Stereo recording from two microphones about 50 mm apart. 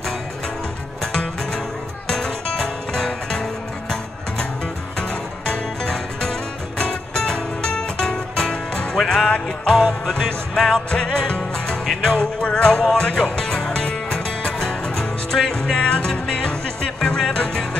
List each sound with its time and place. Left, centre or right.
2.0 s music: centre
5.5 s music: centre
8.9 s music: centre
10.9 s music: centre
11.8 s music: centre
12.1 s music: centre